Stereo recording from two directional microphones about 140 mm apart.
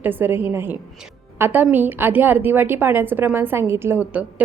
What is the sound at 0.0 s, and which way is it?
A woman's voice, 15° right (ahead or behind).